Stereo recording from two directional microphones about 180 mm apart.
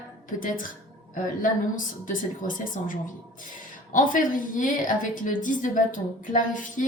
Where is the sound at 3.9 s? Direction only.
45° left (ahead or behind).